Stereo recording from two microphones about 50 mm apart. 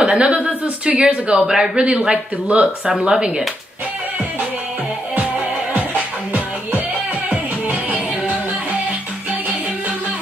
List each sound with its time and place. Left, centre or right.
0.0 s a man's voice: right
1.9 s a man's voice: right
5.1 s music: right
7.2 s music: right